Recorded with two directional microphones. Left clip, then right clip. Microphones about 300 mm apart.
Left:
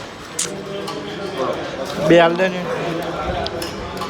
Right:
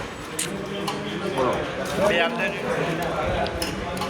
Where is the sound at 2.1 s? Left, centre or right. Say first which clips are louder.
Left 13 dB; left.